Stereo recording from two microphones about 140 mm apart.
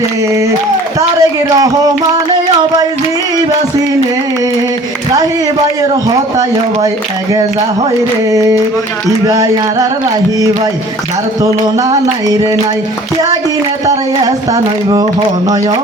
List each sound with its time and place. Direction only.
0.9 s speech: 25° right (ahead or behind)
8.3 s speech: 25° right (ahead or behind)
12.3 s speech: 25° right (ahead or behind)
13.8 s speech: 25° right (ahead or behind)